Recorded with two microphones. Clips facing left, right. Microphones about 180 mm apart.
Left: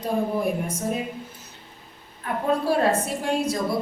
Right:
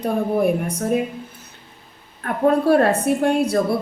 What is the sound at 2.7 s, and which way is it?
Speech, 60° right (ahead or behind).